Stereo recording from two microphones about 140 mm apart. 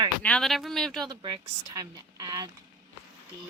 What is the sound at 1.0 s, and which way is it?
A woman's voice, 30° right (ahead or behind).